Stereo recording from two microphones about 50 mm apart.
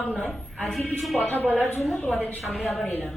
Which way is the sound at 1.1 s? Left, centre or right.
Left.